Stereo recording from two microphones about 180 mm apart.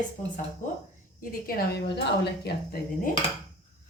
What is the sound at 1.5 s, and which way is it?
A woman's voice, 65° left (ahead or behind).